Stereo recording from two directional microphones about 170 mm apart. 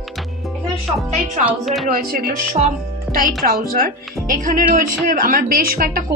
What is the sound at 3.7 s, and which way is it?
Speech, 55° right (ahead or behind).